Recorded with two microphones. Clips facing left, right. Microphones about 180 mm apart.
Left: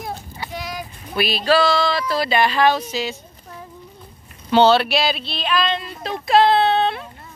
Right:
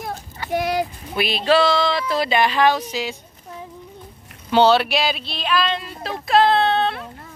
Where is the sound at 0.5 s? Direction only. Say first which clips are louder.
Right 11 dB; 60° right (ahead or behind).